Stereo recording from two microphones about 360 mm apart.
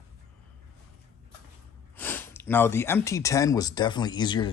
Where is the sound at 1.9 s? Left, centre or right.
Centre.